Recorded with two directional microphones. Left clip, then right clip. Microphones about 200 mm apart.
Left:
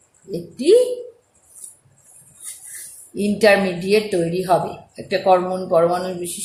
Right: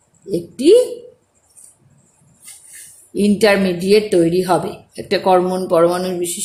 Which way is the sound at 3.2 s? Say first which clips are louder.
Right 1 dB; 45° right (ahead or behind).